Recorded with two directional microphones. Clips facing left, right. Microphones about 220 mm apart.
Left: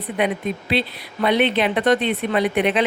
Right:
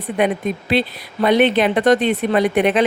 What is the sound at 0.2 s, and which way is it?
Speech, 45° right (ahead or behind).